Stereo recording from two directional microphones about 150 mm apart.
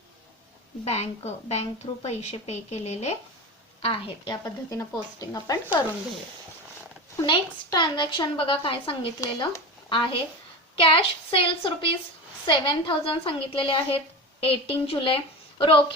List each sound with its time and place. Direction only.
0.9 s a woman's voice: 45° left (ahead or behind)
4.4 s speech: 25° left (ahead or behind)
7.2 s a woman's voice: 25° left (ahead or behind)
9.2 s speech: 20° left (ahead or behind)
9.9 s a woman's voice: 35° left (ahead or behind)